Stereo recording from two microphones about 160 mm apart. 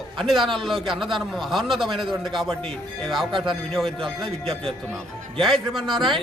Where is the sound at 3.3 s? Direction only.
30° right (ahead or behind).